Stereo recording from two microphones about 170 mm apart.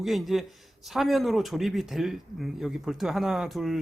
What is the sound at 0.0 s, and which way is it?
Speech, centre (ahead or behind).